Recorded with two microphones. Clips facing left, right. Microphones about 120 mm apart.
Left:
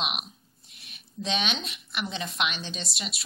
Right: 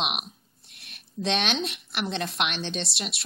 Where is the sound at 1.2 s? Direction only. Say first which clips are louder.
Right 3 dB; 75° right (ahead or behind).